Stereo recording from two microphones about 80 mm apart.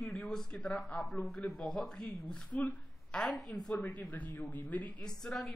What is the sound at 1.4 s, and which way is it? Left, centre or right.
Speech, left.